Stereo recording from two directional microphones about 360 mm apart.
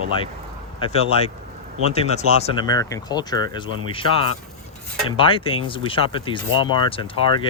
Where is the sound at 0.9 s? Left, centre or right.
Centre.